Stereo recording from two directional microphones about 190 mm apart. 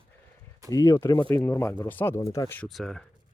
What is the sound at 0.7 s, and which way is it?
Speech, 15° left (ahead or behind).